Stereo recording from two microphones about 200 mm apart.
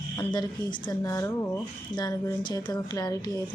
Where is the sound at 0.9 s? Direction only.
15° left (ahead or behind).